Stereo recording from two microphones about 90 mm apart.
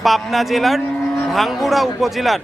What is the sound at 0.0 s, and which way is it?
Speech, centre (ahead or behind).